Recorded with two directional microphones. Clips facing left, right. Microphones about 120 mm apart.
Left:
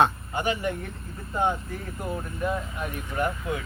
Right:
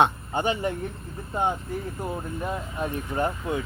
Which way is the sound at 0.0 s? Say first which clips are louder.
Right 1 dB; 30° right (ahead or behind).